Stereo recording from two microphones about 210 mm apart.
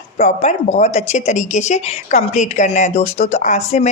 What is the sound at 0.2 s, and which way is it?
Speech, 30° left (ahead or behind).